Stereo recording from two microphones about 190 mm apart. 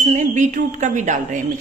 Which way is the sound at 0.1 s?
45° right (ahead or behind).